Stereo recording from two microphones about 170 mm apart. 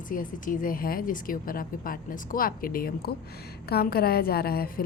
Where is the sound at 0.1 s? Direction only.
55° left (ahead or behind).